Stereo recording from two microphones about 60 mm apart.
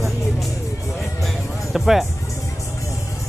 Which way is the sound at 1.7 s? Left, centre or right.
Centre.